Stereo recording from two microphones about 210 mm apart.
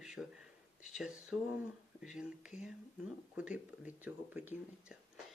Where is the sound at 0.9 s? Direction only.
Centre (ahead or behind).